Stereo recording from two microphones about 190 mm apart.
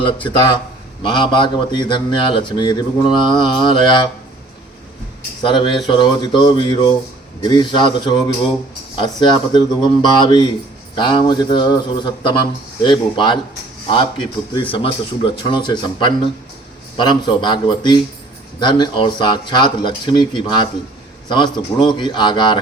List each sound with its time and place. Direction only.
0.0 s speech: 25° left (ahead or behind)
5.4 s a man's voice: 25° left (ahead or behind)